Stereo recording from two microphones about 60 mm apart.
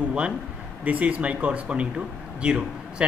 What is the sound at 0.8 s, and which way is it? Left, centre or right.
Speech, right.